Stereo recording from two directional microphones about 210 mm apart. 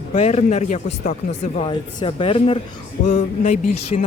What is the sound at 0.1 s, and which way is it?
Speech, 30° left (ahead or behind).